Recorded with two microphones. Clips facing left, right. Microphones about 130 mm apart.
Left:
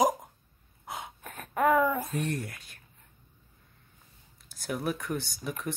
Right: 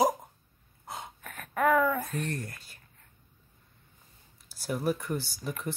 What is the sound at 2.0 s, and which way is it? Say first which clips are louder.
Speech: left 2 dB; 5° left (ahead or behind).